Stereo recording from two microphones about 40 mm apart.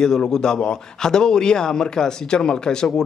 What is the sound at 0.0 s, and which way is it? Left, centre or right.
A man's voice, centre.